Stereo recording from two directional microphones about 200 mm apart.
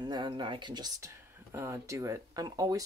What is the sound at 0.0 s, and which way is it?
Speech, 20° right (ahead or behind).